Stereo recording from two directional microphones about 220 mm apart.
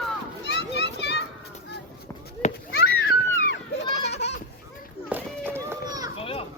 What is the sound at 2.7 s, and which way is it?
Children playing, 45° left (ahead or behind).